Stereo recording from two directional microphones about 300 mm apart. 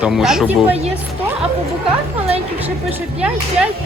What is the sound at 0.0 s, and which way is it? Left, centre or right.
Speech, centre.